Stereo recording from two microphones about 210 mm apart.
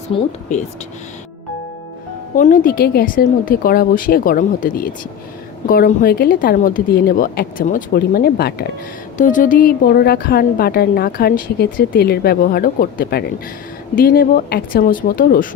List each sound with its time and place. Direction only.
0.1 s speech: 25° left (ahead or behind)
2.3 s a woman's voice: 40° left (ahead or behind)
9.1 s a woman's voice: 40° left (ahead or behind)